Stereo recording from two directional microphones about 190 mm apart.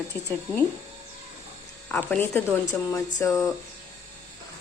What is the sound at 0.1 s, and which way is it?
Speech, 10° left (ahead or behind).